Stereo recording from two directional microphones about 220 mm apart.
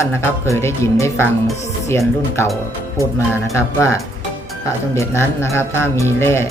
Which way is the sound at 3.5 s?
10° left (ahead or behind).